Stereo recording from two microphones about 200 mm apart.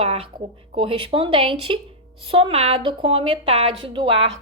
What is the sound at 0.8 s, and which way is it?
A woman's voice, 25° right (ahead or behind).